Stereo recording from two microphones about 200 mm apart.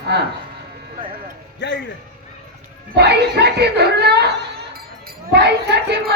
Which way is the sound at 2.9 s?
55° right (ahead or behind).